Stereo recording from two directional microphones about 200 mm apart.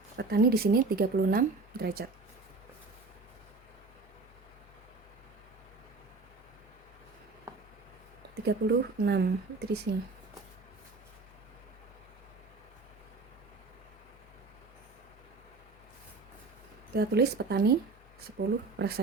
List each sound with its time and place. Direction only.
0.2 s speech: 50° right (ahead or behind)
8.4 s speech: 55° right (ahead or behind)
16.9 s speech: 55° right (ahead or behind)